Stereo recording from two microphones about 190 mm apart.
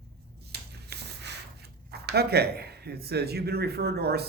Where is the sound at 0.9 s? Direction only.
60° right (ahead or behind).